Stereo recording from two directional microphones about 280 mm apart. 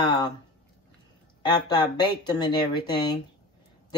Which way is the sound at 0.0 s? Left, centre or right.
Centre.